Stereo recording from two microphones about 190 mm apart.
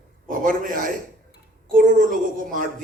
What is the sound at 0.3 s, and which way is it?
A man's voice, 45° right (ahead or behind).